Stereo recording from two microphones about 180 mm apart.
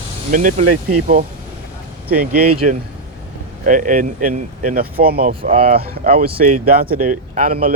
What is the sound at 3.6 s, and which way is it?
Speech, 45° right (ahead or behind).